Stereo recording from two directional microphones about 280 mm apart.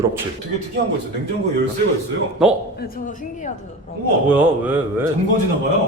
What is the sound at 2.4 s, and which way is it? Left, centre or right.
Speech, centre.